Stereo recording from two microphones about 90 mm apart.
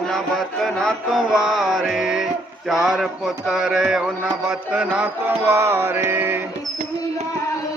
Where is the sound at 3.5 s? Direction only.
5° right (ahead or behind).